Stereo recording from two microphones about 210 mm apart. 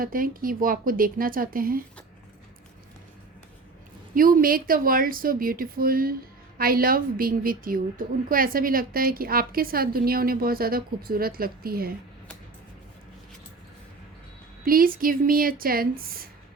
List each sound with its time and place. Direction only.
0.0 s a woman's voice: 40° right (ahead or behind)
4.1 s a woman's voice: 40° right (ahead or behind)
14.6 s a woman's voice: 45° right (ahead or behind)